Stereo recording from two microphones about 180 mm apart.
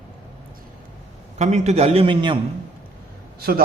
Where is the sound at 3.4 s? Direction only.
55° right (ahead or behind).